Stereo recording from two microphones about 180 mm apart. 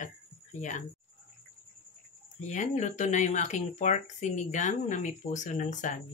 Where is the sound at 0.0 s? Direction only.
45° left (ahead or behind).